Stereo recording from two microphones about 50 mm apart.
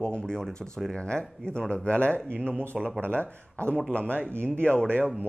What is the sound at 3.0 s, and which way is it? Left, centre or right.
Speech, right.